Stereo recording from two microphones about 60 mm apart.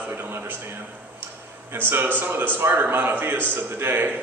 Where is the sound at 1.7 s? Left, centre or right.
Right.